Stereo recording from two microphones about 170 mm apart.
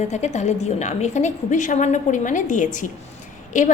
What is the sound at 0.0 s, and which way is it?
A woman's voice, 40° left (ahead or behind).